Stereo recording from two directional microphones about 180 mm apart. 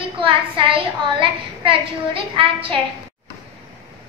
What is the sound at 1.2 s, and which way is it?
Speech, 30° right (ahead or behind).